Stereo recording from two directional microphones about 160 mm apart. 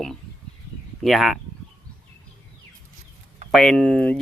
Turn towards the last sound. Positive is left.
turn(degrees=5)  # may be behind; listen again after turning